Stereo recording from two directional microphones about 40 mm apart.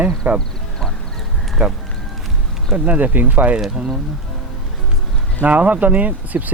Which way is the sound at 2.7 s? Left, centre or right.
Right.